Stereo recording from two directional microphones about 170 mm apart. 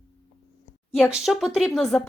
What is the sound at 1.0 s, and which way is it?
A woman's voice, 5° right (ahead or behind).